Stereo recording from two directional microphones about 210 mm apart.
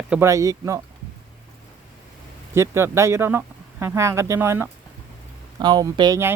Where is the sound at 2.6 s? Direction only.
15° right (ahead or behind).